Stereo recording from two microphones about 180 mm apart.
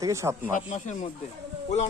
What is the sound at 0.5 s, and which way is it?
Speech, 45° left (ahead or behind).